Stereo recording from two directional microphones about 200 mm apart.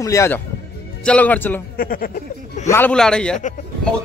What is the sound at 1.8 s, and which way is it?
Speech, 45° left (ahead or behind).